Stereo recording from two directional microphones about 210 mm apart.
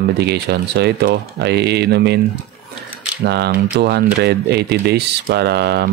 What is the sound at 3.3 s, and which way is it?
Speech, 55° right (ahead or behind).